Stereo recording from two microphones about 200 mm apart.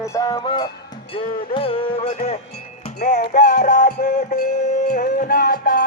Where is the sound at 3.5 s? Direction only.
40° left (ahead or behind).